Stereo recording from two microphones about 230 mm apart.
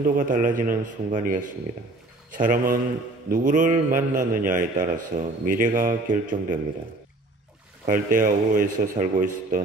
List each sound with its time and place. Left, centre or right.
0.0 s a man's voice: right
7.8 s a man's voice: right